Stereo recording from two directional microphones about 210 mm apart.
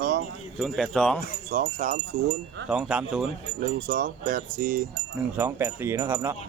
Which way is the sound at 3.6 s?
40° right (ahead or behind).